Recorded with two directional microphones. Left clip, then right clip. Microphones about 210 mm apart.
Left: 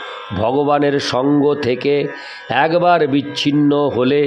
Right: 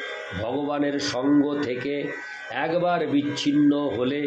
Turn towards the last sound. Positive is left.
turn(degrees=50)  # may be behind; listen again after turning